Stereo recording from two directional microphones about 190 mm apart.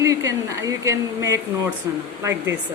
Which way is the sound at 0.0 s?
15° right (ahead or behind).